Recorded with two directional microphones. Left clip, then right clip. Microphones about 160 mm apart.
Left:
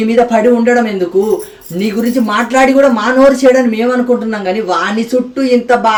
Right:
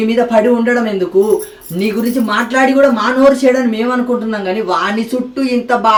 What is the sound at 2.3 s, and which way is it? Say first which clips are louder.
Speech: left 2 dB; 10° left (ahead or behind).